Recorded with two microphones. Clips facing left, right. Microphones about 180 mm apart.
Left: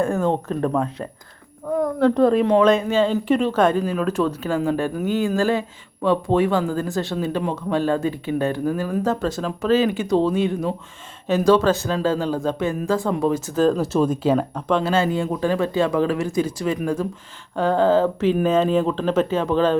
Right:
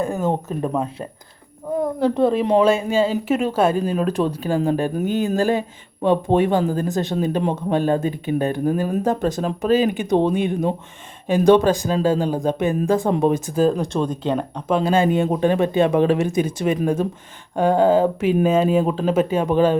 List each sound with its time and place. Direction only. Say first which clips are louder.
0.0 s speech: left 1 dB; 20° right (ahead or behind)
2.0 s speech: left 2 dB; 5° right (ahead or behind)
4.5 s speech: right 2 dB; 35° right (ahead or behind)
5.0 s speech: even; 20° right (ahead or behind)
13.7 s speech: left 3 dB; 5° left (ahead or behind)
14.7 s speech: right 3 dB; 15° right (ahead or behind)